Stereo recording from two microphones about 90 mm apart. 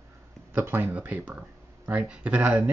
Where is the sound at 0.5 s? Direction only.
25° right (ahead or behind).